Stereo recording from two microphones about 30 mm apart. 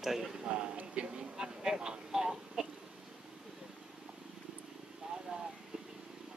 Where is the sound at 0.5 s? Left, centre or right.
Right.